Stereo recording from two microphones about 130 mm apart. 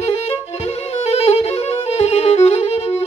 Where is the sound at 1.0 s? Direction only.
50° left (ahead or behind).